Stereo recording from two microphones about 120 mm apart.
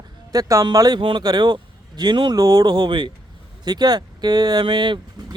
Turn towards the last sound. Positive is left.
turn(degrees=-40)  # may be behind; listen again after turning